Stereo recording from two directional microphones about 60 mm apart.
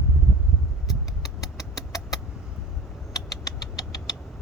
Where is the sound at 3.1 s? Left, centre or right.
Left.